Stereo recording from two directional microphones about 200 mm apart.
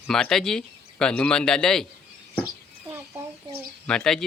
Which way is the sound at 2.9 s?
15° right (ahead or behind).